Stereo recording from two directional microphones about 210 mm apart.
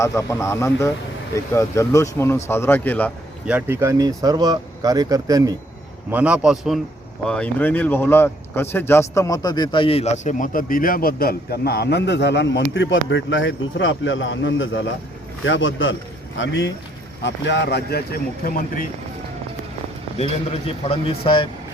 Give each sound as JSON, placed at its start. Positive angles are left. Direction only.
{"t": 0.0, "sound": "speech", "side_deg": 15}
{"t": 3.4, "sound": "a man's voice", "side_deg": -10}
{"t": 20.1, "sound": "speech", "side_deg": 30}